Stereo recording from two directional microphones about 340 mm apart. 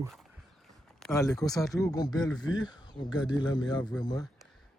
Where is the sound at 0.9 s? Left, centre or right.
Centre.